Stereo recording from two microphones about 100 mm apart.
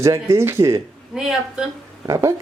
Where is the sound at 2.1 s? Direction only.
30° right (ahead or behind).